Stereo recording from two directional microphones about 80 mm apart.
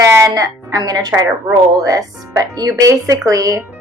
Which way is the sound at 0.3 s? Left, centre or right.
Right.